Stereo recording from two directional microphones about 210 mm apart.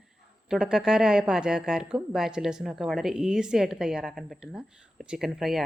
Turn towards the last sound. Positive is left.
turn(degrees=0)  # may be behind; listen again after turning